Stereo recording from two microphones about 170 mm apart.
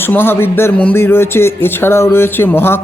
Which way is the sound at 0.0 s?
15° left (ahead or behind).